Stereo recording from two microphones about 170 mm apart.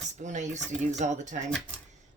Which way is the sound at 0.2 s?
45° right (ahead or behind).